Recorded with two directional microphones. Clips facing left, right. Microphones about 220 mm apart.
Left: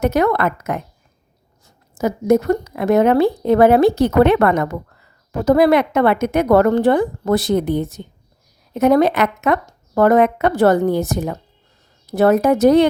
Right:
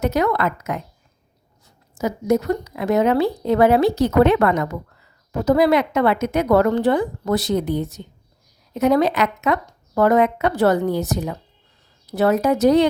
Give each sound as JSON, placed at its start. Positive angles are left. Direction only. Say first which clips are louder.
{"t": 0.0, "sound": "a woman's voice", "louder": "left 3 dB", "side_deg": 55}